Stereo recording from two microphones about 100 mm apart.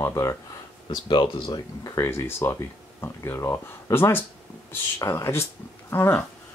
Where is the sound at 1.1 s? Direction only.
55° left (ahead or behind).